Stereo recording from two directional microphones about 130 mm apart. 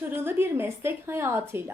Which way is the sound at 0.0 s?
15° right (ahead or behind).